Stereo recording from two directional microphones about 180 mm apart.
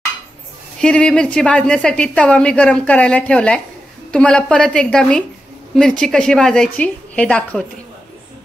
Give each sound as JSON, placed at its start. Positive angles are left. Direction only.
{"t": 0.7, "sound": "a woman's voice", "side_deg": 5}